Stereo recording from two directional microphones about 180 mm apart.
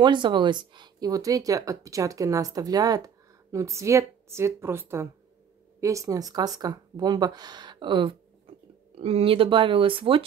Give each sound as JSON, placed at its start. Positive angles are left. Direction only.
{"t": 0.0, "sound": "a woman's voice", "side_deg": -25}